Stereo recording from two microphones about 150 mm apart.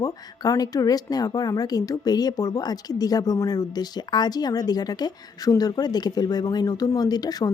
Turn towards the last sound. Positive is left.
turn(degrees=25)  # may be behind; listen again after turning